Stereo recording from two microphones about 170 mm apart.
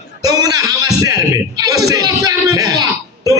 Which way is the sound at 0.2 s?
20° right (ahead or behind).